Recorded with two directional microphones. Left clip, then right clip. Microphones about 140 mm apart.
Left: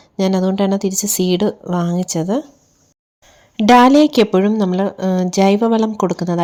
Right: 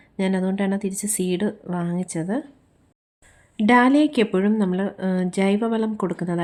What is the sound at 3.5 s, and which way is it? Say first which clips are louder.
A woman's voice: left 8 dB; 40° left (ahead or behind).